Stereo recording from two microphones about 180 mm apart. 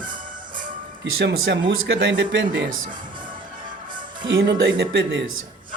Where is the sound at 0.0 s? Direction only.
50° right (ahead or behind).